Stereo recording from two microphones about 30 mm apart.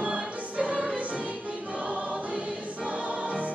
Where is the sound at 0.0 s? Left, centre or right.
Right.